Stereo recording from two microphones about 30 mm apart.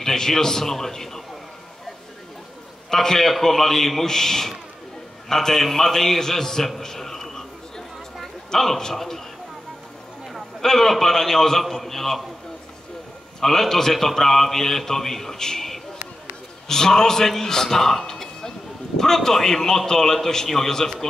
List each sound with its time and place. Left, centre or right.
0.0 s a man's voice: centre
2.9 s a man's voice: centre
6.8 s a sound: centre
8.5 s a man's voice: centre
10.6 s a man's voice: centre
13.4 s a man's voice: centre
16.6 s a man's voice: centre